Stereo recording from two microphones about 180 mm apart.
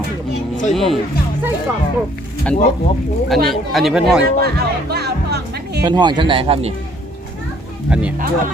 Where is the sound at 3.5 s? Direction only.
Centre (ahead or behind).